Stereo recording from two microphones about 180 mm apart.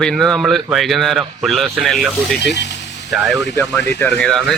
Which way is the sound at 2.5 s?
75° left (ahead or behind).